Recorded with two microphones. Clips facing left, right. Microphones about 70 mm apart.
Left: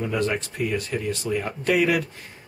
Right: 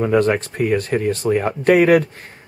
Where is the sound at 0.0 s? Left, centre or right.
Right.